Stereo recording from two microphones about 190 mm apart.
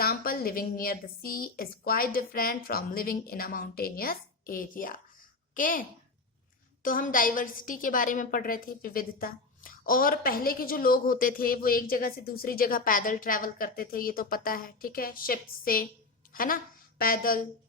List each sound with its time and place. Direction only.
0.0 s a woman's voice: 50° left (ahead or behind)
6.8 s a woman's voice: 45° left (ahead or behind)